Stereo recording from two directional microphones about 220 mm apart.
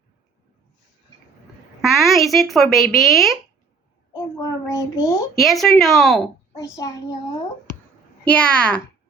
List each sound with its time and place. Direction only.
2.0 s speech: centre (ahead or behind)
4.1 s a child's voice: 15° left (ahead or behind)
5.4 s speech: centre (ahead or behind)
6.5 s a child's voice: 15° left (ahead or behind)
8.3 s speech: 5° left (ahead or behind)